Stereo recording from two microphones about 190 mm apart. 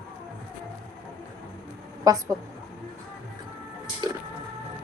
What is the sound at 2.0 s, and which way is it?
Speech, 15° right (ahead or behind).